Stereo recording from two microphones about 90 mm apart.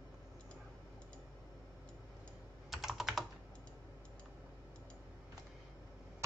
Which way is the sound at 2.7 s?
5° right (ahead or behind).